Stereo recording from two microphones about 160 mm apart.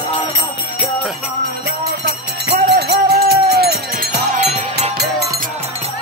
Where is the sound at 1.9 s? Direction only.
90° right.